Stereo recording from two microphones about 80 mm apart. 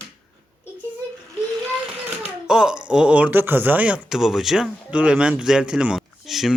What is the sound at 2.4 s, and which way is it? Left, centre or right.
Speech, centre.